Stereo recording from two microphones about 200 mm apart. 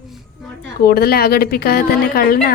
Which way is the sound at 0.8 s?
50° left (ahead or behind).